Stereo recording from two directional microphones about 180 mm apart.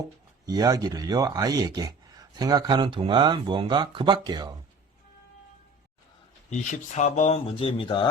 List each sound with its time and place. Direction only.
0.4 s speech: 20° right (ahead or behind)
6.5 s speech: 40° left (ahead or behind)